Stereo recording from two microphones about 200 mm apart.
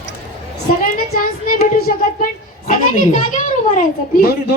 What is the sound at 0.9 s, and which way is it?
Child singing, 45° left (ahead or behind).